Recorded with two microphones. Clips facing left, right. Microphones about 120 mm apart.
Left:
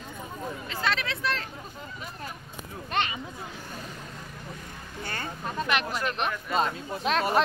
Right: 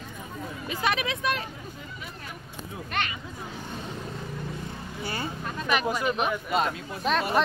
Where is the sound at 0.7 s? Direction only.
15° right (ahead or behind).